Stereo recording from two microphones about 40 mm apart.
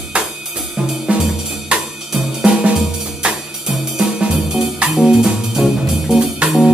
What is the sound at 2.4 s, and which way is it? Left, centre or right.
Music, right.